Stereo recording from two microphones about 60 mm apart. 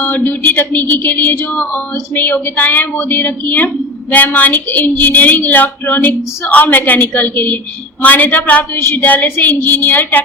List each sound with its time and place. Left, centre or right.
0.0 s speech: left